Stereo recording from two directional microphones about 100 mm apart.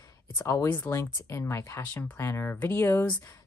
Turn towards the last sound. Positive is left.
turn(degrees=20)  # may be behind; listen again after turning